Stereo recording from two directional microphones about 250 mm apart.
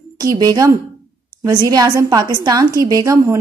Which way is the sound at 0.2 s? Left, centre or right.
Centre.